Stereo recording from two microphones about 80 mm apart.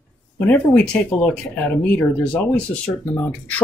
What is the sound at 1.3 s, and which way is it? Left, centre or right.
Speech, centre.